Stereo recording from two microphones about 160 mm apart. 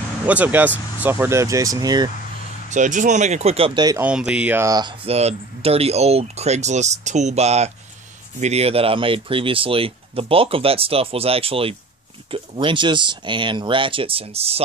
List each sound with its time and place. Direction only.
0.3 s speech: 10° right (ahead or behind)
2.7 s speech: 50° right (ahead or behind); by 3.8 s 35° right (ahead or behind)
4.0 s speech: 5° right (ahead or behind); by 4.9 s 20° right (ahead or behind)
5.0 s speech: 40° right (ahead or behind)